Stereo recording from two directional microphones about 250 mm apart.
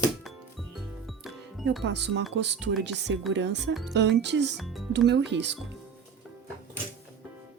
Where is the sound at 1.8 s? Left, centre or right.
Right.